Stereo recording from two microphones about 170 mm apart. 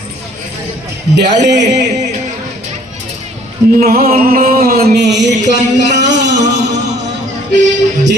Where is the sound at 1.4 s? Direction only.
90° right.